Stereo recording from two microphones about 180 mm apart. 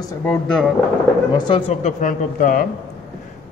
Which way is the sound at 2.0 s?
50° left (ahead or behind).